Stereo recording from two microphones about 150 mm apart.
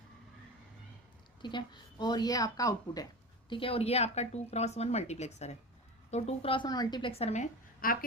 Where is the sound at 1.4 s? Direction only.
30° left (ahead or behind).